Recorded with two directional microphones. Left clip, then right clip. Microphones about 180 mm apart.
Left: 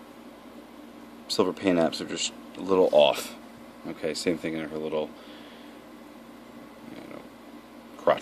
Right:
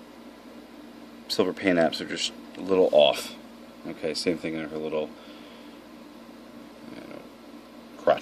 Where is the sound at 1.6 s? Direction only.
5° left (ahead or behind).